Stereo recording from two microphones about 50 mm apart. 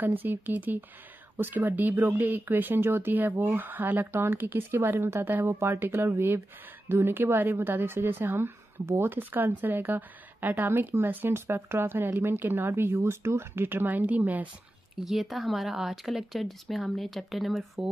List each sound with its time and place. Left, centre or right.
0.0 s speech: right
15.0 s speech: centre